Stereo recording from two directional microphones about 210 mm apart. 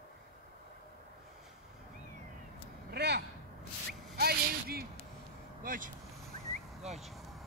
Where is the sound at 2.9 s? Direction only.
50° right (ahead or behind).